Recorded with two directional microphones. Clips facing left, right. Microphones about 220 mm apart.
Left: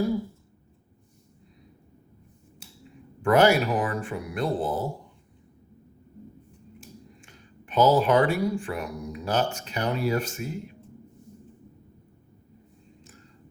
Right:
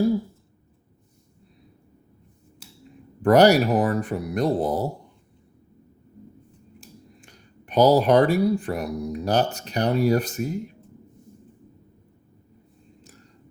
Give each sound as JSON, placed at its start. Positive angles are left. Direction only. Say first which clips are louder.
{"t": 3.2, "sound": "speech", "louder": "right 4 dB", "side_deg": -40}
{"t": 7.2, "sound": "speech", "louder": "even", "side_deg": -40}